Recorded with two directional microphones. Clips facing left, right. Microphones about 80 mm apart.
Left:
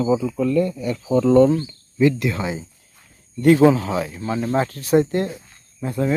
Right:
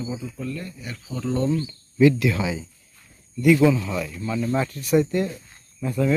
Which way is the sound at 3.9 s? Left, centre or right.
Left.